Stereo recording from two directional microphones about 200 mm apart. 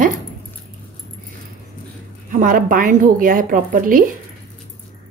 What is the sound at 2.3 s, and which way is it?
A woman's voice, 45° right (ahead or behind).